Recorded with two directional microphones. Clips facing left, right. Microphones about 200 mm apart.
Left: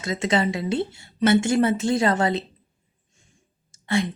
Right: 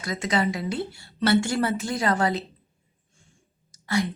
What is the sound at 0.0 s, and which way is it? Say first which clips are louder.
Speech: left 3 dB; 25° left (ahead or behind).